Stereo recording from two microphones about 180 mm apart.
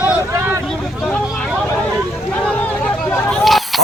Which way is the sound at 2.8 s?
5° left (ahead or behind).